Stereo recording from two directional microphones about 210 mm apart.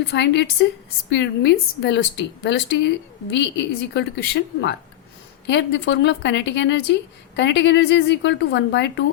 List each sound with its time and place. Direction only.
0.1 s a woman's voice: 55° left (ahead or behind)